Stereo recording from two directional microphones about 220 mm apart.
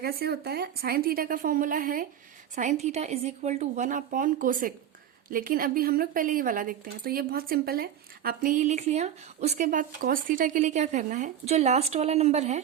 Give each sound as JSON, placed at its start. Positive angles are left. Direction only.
{"t": 0.0, "sound": "speech", "side_deg": -45}